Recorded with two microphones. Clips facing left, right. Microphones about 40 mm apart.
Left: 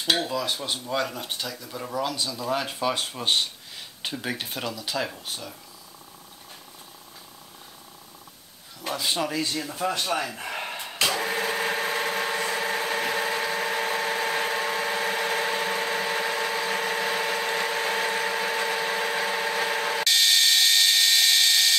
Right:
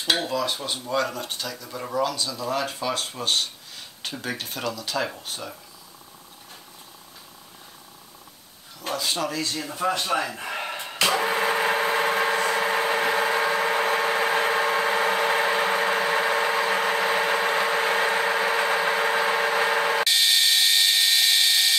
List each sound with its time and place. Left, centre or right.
0.0 s dishes: centre
0.8 s speech: centre
1.5 s dishes: centre
2.0 s speech: centre
4.9 s dishes: centre
8.8 s speech: centre
9.6 s a sound: centre
20.1 s a sound: centre